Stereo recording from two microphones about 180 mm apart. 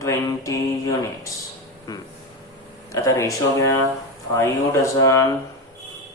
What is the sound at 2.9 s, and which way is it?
Mantra, 15° left (ahead or behind).